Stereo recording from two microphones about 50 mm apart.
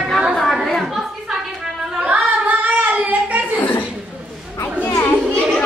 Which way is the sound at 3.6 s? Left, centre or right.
Left.